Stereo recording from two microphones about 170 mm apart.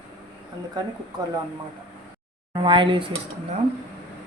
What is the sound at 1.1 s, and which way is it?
Speech, 25° right (ahead or behind).